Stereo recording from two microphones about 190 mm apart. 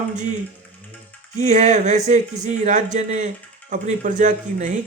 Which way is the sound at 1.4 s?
35° right (ahead or behind).